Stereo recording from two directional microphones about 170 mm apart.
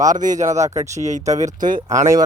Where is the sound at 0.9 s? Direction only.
45° right (ahead or behind).